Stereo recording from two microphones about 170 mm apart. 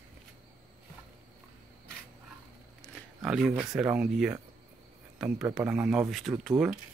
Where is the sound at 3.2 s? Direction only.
Centre (ahead or behind).